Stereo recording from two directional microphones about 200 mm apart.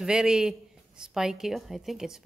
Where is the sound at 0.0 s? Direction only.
5° right (ahead or behind).